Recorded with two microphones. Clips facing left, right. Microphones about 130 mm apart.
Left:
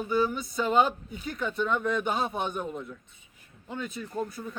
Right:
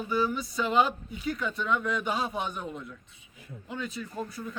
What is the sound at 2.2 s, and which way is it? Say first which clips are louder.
Speech: left 2 dB; centre (ahead or behind).